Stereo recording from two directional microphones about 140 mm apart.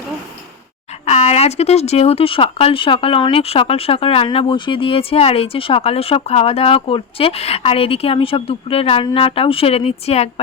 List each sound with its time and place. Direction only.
1.0 s speech: 55° left (ahead or behind)